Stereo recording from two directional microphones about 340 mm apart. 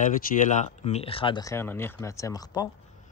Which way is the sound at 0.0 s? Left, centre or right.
Left.